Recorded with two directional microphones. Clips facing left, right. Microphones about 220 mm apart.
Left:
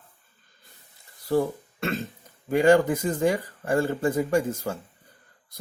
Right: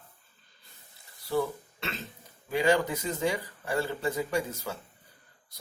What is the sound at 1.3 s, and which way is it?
Speech, 50° left (ahead or behind).